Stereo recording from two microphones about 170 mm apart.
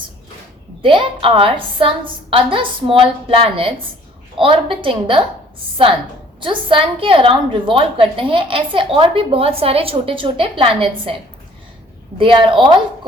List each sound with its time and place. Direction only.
0.8 s a woman's voice: 30° right (ahead or behind)
6.4 s a woman's voice: 30° right (ahead or behind)
12.1 s a woman's voice: 30° right (ahead or behind)